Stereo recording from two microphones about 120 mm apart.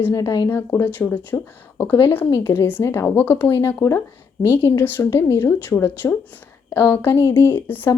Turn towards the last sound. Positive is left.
turn(degrees=15)  # may be behind; listen again after turning